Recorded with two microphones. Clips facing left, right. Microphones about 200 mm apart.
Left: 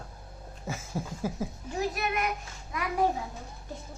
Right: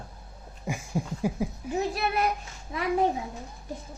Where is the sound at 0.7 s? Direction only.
15° right (ahead or behind).